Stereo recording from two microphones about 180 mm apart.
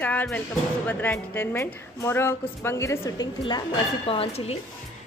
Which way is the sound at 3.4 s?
25° left (ahead or behind).